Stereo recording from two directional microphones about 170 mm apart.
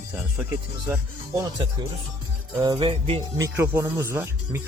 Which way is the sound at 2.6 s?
25° right (ahead or behind).